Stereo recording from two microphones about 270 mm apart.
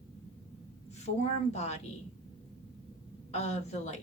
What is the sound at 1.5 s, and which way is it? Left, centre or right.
Speech, left.